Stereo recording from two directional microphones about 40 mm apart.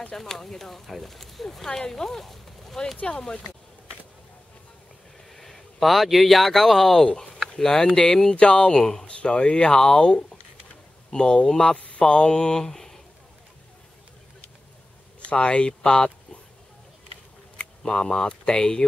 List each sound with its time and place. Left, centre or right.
0.1 s speech: centre
3.2 s speech: centre
5.3 s speech: centre
11.7 s speech: left
12.1 s speech: centre
15.2 s speech: left
17.8 s speech: centre